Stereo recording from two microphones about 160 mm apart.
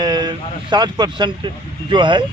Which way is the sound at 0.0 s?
25° right (ahead or behind).